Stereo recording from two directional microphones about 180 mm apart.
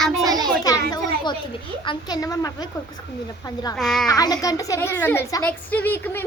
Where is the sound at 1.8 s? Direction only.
20° left (ahead or behind).